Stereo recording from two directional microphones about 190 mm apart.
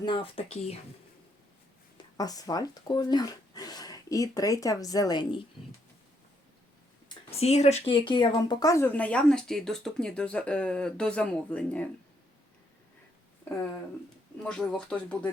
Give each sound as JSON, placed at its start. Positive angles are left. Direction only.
{"t": 0.0, "sound": "speech", "side_deg": 25}
{"t": 2.1, "sound": "speech", "side_deg": 20}
{"t": 7.1, "sound": "speech", "side_deg": 30}
{"t": 14.4, "sound": "speech", "side_deg": 5}